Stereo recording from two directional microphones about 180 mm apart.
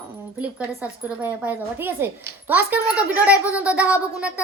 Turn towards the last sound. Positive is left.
turn(degrees=-5)  # may be behind; listen again after turning